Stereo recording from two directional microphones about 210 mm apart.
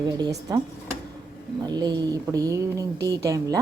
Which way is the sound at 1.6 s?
20° right (ahead or behind).